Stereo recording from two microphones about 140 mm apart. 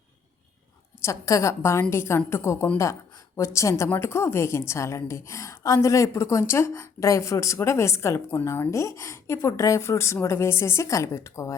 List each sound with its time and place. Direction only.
1.0 s a woman's voice: 25° left (ahead or behind)